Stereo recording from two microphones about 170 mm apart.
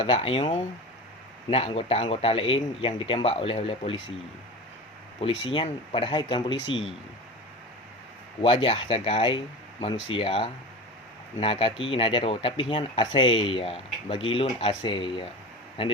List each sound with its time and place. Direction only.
0.0 s speech: 30° left (ahead or behind)
5.5 s speech: 30° left (ahead or behind)
8.4 s speech: 30° left (ahead or behind)